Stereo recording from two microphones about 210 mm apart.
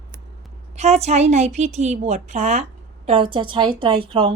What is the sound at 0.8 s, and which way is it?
A woman's voice, 30° right (ahead or behind).